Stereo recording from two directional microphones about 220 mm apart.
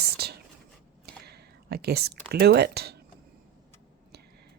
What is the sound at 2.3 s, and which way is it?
Speech, 45° right (ahead or behind).